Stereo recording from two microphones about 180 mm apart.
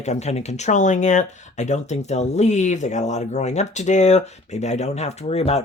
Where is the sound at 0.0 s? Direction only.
40° left (ahead or behind).